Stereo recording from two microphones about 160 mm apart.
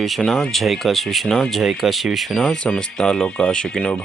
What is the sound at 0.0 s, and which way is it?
Speech, centre (ahead or behind).